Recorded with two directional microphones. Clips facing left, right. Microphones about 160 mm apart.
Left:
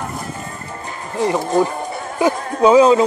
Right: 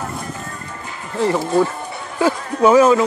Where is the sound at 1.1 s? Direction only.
15° left (ahead or behind).